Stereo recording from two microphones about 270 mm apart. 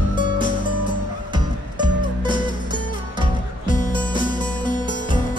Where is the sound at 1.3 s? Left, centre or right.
Centre.